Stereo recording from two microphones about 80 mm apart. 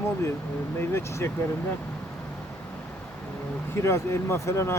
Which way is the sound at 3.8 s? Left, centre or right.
Left.